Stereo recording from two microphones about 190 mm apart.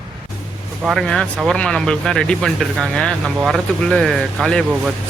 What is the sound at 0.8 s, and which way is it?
Speech, centre (ahead or behind).